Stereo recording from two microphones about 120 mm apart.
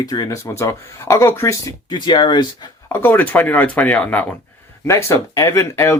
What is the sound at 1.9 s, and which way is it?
Speech, 40° left (ahead or behind).